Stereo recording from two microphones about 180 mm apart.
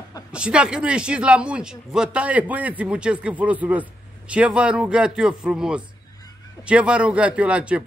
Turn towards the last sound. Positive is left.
turn(degrees=-5)  # may be behind; listen again after turning